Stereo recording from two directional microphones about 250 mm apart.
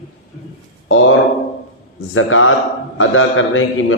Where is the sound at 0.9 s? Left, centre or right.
Left.